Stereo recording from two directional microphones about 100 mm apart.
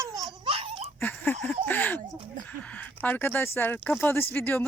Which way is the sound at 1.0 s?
20° left (ahead or behind).